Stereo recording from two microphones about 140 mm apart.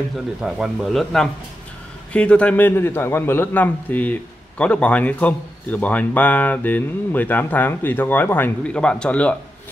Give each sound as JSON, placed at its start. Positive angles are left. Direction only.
{"t": 0.4, "sound": "a man's voice", "side_deg": -5}